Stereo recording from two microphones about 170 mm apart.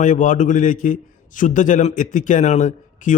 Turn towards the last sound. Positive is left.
turn(degrees=45)  # may be behind; listen again after turning